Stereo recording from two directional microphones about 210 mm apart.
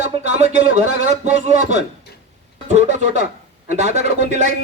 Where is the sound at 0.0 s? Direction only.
35° right (ahead or behind).